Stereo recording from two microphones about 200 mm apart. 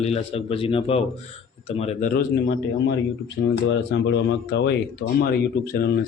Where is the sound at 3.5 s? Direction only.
65° left (ahead or behind).